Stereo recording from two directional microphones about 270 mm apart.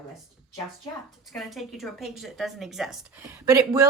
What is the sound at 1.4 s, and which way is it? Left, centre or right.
Speech, centre.